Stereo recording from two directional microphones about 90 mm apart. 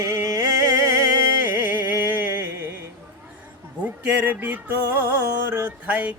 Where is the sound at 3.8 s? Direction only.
20° right (ahead or behind).